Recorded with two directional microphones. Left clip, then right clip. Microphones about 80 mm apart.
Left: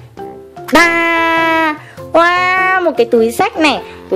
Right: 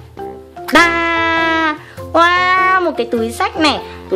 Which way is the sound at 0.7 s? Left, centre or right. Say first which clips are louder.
Left 2 dB; left.